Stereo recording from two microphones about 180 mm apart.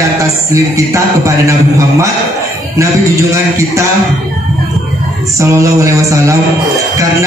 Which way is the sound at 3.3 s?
15° right (ahead or behind).